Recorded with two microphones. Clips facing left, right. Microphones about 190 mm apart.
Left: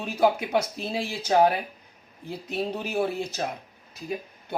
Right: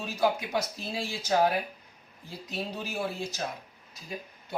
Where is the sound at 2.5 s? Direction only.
60° left (ahead or behind).